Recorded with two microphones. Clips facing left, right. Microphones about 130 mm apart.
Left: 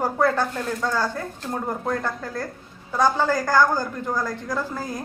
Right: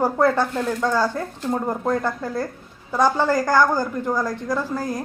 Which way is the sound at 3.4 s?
15° right (ahead or behind).